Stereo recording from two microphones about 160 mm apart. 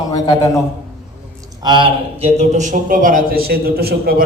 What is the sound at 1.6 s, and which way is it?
A man's voice, 30° right (ahead or behind).